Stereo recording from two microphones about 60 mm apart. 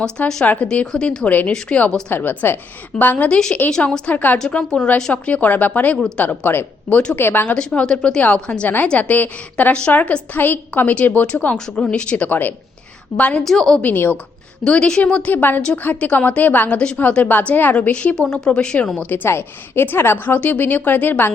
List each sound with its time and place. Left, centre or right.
0.4 s a woman's voice: left
3.2 s a woman's voice: centre
4.4 s a woman's voice: centre
5.1 s a woman's voice: left
7.4 s a woman's voice: centre
13.4 s a woman's voice: centre
13.8 s a woman's voice: left
14.6 s a woman's voice: centre
19.1 s a woman's voice: left
20.4 s a woman's voice: left